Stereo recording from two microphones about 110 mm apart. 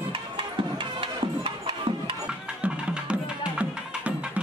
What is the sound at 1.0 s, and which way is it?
Music, 50° right (ahead or behind).